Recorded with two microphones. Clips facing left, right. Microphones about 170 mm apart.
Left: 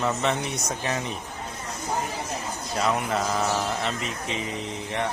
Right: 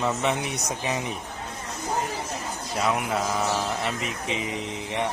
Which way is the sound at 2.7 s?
5° right (ahead or behind).